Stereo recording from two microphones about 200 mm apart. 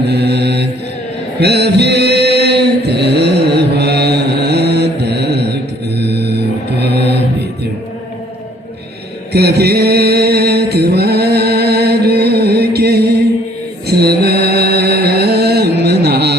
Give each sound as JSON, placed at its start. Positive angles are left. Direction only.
{"t": 0.1, "sound": "mantra", "side_deg": -55}
{"t": 1.4, "sound": "chant", "side_deg": -55}
{"t": 6.7, "sound": "mantra", "side_deg": -55}
{"t": 9.3, "sound": "mantra", "side_deg": -55}